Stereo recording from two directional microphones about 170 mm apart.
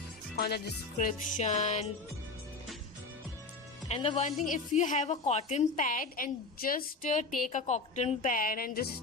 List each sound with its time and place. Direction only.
0.3 s speech: 70° left (ahead or behind)
0.9 s a woman's voice: 50° left (ahead or behind)
3.8 s a woman's voice: 40° left (ahead or behind); by 8.8 s 55° left (ahead or behind)